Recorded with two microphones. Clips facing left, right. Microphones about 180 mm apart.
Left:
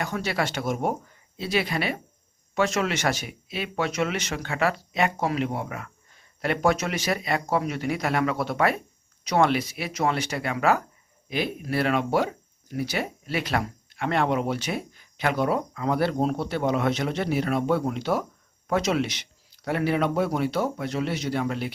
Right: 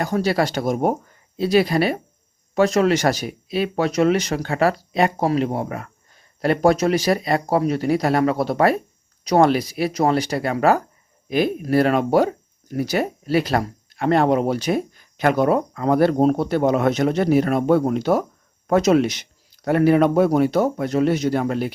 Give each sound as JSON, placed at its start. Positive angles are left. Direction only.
{"t": 0.0, "sound": "speech", "side_deg": -35}